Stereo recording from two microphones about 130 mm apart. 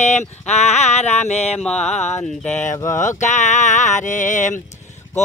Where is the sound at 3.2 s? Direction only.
65° left (ahead or behind).